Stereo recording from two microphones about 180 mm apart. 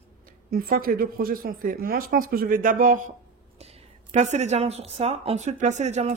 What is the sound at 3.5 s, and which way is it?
A woman's voice, 35° right (ahead or behind).